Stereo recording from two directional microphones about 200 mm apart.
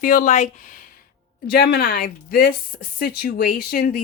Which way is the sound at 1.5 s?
50° left (ahead or behind).